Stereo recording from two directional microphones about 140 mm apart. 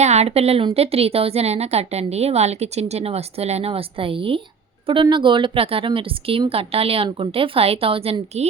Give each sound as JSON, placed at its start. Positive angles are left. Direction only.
{"t": 0.0, "sound": "a woman's voice", "side_deg": -50}